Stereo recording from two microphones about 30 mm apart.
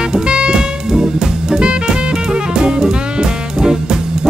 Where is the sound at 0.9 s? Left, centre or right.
Right.